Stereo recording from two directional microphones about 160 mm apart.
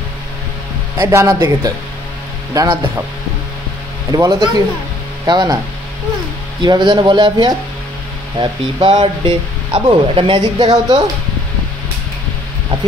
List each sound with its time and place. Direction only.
0.9 s speech: 15° right (ahead or behind)
4.1 s speech: 20° right (ahead or behind)
6.6 s speech: 30° right (ahead or behind)